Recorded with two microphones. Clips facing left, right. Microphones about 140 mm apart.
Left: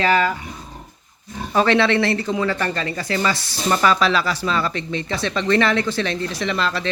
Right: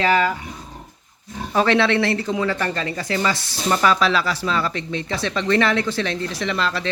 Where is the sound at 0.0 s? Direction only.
15° right (ahead or behind).